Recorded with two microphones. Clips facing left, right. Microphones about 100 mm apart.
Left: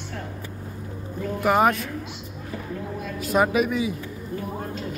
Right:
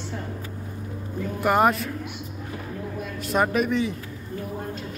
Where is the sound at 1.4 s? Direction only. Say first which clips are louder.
Even; centre (ahead or behind).